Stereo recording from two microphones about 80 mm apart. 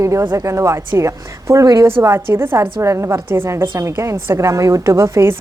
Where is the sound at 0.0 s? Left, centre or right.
Right.